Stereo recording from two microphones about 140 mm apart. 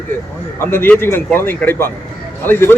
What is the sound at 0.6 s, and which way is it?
Speech, 15° left (ahead or behind).